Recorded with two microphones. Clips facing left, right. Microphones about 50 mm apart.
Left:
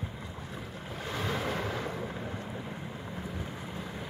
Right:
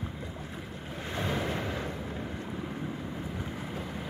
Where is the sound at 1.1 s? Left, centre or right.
Centre.